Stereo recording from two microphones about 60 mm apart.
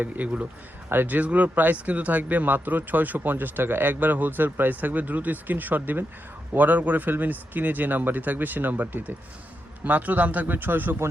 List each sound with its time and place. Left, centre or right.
0.0 s a man's voice: right